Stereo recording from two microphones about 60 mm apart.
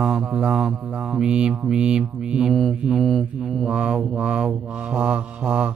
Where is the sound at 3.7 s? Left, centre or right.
Centre.